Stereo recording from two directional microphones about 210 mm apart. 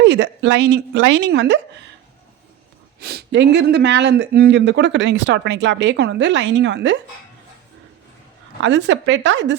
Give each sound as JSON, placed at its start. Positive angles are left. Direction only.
{"t": 0.0, "sound": "speech", "side_deg": -60}
{"t": 3.0, "sound": "speech", "side_deg": -50}
{"t": 8.6, "sound": "speech", "side_deg": -60}